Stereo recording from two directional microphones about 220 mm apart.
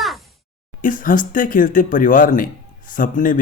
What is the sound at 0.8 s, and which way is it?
Speech, 40° left (ahead or behind).